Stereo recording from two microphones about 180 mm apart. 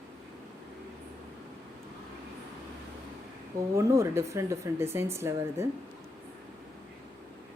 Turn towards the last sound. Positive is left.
turn(degrees=-15)  # may be behind; listen again after turning